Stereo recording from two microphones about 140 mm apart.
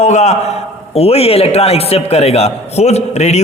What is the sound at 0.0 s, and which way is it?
A man's voice, 55° left (ahead or behind).